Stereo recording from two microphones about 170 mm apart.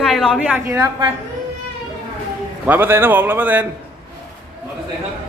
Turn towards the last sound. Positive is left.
turn(degrees=-10)  # may be behind; listen again after turning